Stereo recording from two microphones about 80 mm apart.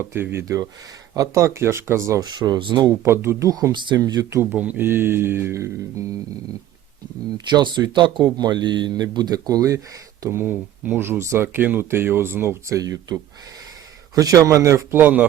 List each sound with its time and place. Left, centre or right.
0.0 s speech: right
1.1 s a man's voice: right
2.4 s speech: right
3.0 s a man's voice: right
3.5 s speech: right
4.4 s speech: centre; by 5.7 s right
7.5 s speech: right
10.2 s a man's voice: right